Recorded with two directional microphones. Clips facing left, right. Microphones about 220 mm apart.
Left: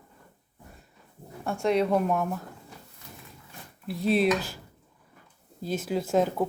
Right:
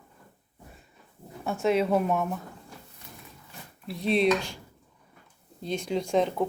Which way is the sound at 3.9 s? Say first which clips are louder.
Even; centre (ahead or behind).